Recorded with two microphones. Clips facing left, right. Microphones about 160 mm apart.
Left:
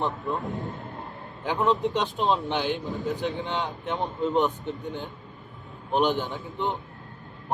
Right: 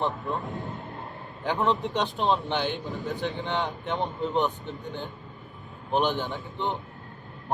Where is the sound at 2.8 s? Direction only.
Centre (ahead or behind).